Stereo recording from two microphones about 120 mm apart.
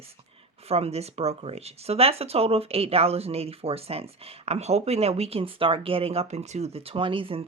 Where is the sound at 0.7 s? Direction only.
60° right (ahead or behind).